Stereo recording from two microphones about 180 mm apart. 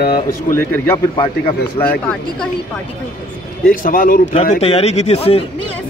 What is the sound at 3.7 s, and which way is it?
Speech, 50° left (ahead or behind).